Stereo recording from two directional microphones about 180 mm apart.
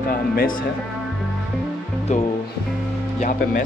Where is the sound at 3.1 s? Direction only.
50° left (ahead or behind).